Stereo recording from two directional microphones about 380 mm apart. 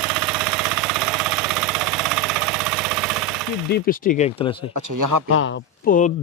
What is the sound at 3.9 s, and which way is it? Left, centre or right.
Speech, left.